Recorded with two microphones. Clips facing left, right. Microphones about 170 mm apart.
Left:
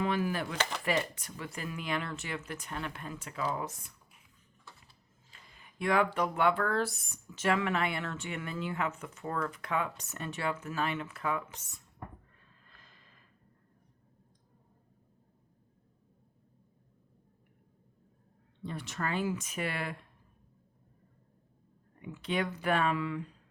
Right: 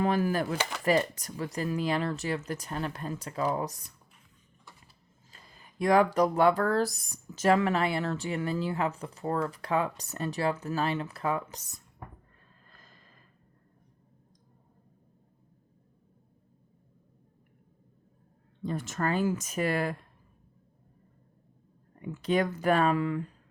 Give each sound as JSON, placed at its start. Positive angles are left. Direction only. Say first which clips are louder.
{"t": 0.0, "sound": "speech", "louder": "right 5 dB", "side_deg": -40}
{"t": 0.5, "sound": "speech", "louder": "right 3 dB", "side_deg": -10}
{"t": 0.9, "sound": "speech", "louder": "right 9 dB", "side_deg": -40}
{"t": 5.3, "sound": "speech", "louder": "right 3 dB", "side_deg": -35}
{"t": 12.6, "sound": "a sound", "louder": "right 4 dB", "side_deg": -40}
{"t": 18.6, "sound": "speech", "louder": "right 6 dB", "side_deg": -45}
{"t": 22.0, "sound": "speech", "louder": "right 6 dB", "side_deg": -40}